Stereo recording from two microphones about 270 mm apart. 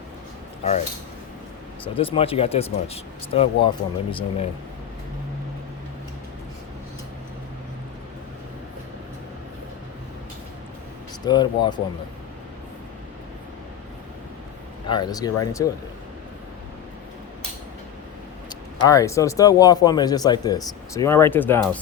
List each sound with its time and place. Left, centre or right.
2.0 s speech: centre
11.3 s speech: centre
14.8 s speech: centre
18.4 s speech: centre